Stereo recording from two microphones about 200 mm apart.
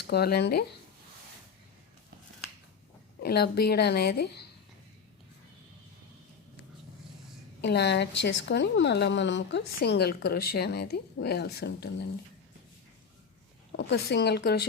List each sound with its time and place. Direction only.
0.1 s a woman's voice: 50° left (ahead or behind)
3.2 s a woman's voice: 50° left (ahead or behind)
7.6 s a woman's voice: 55° left (ahead or behind)
13.7 s a woman's voice: 55° left (ahead or behind)